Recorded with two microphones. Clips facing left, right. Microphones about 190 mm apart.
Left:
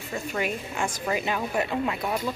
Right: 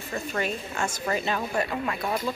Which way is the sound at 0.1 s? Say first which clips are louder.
Even; 10° left (ahead or behind).